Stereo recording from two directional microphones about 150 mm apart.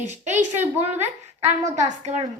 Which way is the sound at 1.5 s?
50° right (ahead or behind).